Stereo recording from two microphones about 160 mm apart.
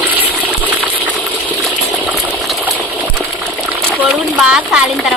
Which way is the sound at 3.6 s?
15° right (ahead or behind).